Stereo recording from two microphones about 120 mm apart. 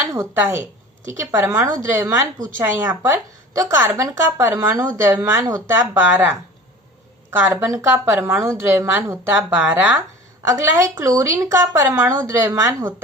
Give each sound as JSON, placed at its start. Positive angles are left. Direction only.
{"t": 0.1, "sound": "a woman's voice", "side_deg": -20}